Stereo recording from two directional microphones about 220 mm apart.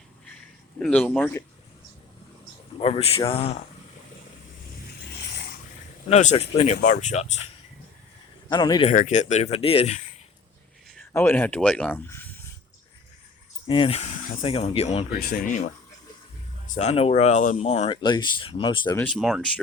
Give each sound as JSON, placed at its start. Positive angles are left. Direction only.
{"t": 0.8, "sound": "speech", "side_deg": 5}
{"t": 2.8, "sound": "speech", "side_deg": 25}
{"t": 6.1, "sound": "speech", "side_deg": 30}
{"t": 8.4, "sound": "speech", "side_deg": 20}
{"t": 8.9, "sound": "speech", "side_deg": 30}
{"t": 10.9, "sound": "speech", "side_deg": 10}
{"t": 13.7, "sound": "speech", "side_deg": 25}
{"t": 15.2, "sound": "speech", "side_deg": 40}
{"t": 18.9, "sound": "speech", "side_deg": 5}